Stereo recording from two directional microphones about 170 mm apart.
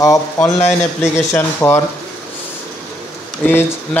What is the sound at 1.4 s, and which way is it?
Speech, 15° left (ahead or behind).